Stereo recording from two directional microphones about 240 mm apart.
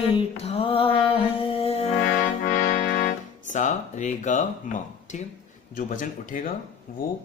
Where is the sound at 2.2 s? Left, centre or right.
Left.